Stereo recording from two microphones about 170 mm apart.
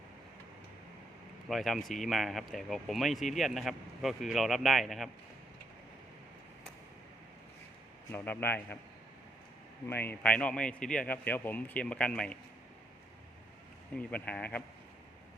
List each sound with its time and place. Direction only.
1.5 s speech: centre (ahead or behind)
8.1 s a man's voice: 10° left (ahead or behind)
9.8 s a man's voice: 10° left (ahead or behind)
13.9 s a man's voice: 5° left (ahead or behind)